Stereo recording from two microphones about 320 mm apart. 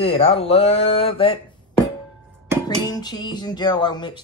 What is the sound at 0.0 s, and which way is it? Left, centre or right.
Speech, centre.